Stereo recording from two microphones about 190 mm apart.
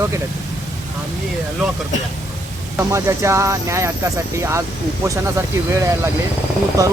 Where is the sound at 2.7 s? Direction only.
15° right (ahead or behind).